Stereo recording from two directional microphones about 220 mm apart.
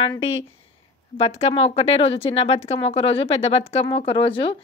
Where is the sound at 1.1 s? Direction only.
30° left (ahead or behind).